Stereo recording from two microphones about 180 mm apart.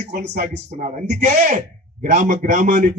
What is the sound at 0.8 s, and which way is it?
A man's voice, 40° right (ahead or behind).